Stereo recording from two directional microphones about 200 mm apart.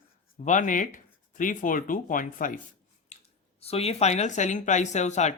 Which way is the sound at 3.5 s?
30° left (ahead or behind).